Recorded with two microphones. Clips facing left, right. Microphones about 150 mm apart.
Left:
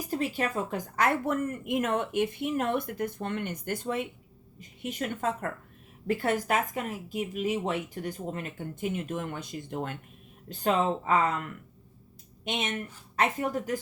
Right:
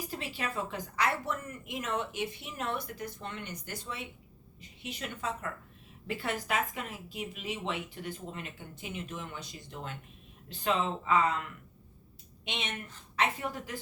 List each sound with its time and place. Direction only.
0.1 s speech: 45° left (ahead or behind)
12.5 s speech: 45° left (ahead or behind)